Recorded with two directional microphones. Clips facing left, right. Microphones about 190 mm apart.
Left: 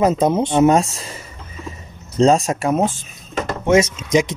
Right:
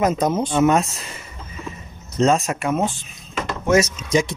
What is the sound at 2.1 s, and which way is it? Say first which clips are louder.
Speech: left 4 dB; 30° left (ahead or behind).